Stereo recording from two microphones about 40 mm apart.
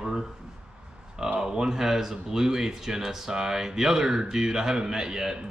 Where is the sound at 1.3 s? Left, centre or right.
Centre.